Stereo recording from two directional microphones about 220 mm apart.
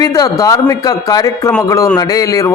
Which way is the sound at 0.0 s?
15° left (ahead or behind).